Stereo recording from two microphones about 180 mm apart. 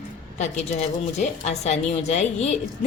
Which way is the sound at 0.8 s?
40° left (ahead or behind).